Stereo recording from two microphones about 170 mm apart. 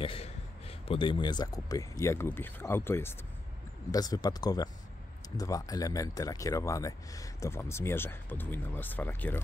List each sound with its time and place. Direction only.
0.0 s a man's voice: 35° left (ahead or behind); by 9.4 s 10° left (ahead or behind)